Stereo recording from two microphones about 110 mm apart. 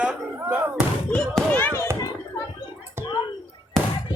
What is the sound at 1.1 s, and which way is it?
Basketball bounce, 15° left (ahead or behind).